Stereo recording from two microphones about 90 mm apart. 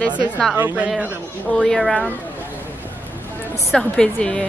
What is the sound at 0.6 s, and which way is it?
Speech, 25° right (ahead or behind).